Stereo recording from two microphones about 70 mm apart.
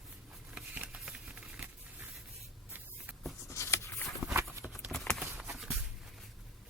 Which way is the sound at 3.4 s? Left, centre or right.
Left.